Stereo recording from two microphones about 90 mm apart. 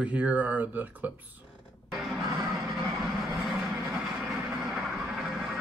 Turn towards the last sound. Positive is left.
turn(degrees=-5)  # may be behind; listen again after turning